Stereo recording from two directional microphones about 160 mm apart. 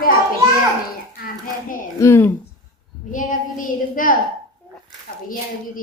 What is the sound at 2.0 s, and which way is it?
Speech, 15° left (ahead or behind).